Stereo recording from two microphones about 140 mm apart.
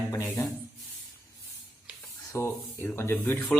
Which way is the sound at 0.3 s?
20° left (ahead or behind).